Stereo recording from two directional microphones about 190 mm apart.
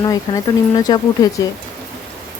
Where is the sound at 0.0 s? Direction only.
20° left (ahead or behind).